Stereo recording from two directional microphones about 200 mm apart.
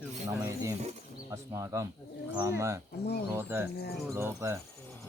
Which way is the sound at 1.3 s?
15° right (ahead or behind).